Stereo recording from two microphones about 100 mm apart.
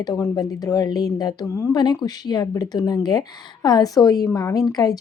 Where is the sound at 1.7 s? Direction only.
45° left (ahead or behind).